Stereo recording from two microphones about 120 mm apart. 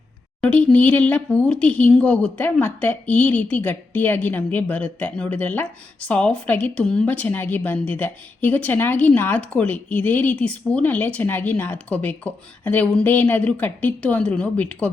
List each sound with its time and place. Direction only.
0.4 s a woman's voice: 10° left (ahead or behind)